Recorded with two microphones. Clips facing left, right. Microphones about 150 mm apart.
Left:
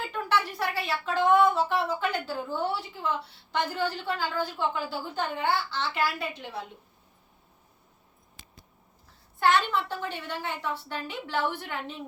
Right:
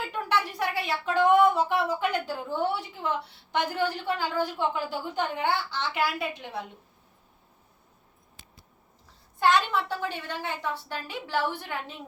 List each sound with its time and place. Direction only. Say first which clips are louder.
0.1 s speech: left 1 dB; 15° right (ahead or behind)
8.4 s a sound: left 1 dB; 25° right (ahead or behind)
9.4 s speech: right 1 dB; 15° right (ahead or behind)